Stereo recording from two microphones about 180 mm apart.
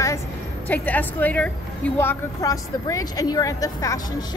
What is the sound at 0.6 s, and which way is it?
A woman's voice, 10° left (ahead or behind).